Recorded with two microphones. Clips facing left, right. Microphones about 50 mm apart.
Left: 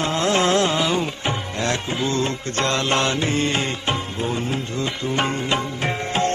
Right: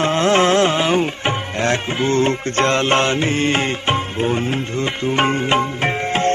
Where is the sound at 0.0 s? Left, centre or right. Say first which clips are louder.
Right 5 dB; right.